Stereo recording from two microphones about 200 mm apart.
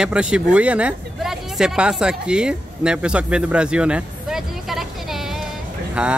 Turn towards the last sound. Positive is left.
turn(degrees=-5)  # may be behind; listen again after turning